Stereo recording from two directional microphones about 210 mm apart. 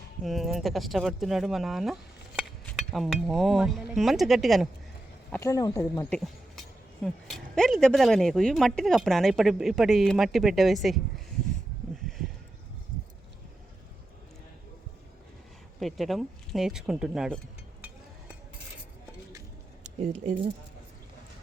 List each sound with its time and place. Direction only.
0.2 s speech: centre (ahead or behind)
5.3 s speech: 15° left (ahead or behind)
6.1 s a sound: centre (ahead or behind)
7.5 s speech: 5° left (ahead or behind)
15.8 s speech: centre (ahead or behind)
19.8 s speech: 35° right (ahead or behind)